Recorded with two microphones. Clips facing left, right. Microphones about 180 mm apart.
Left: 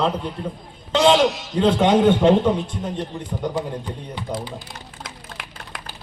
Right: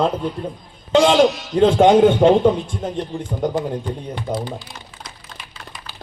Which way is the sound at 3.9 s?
50° right (ahead or behind).